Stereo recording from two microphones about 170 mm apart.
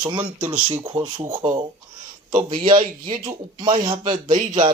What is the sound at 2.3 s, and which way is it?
Speech, 30° right (ahead or behind).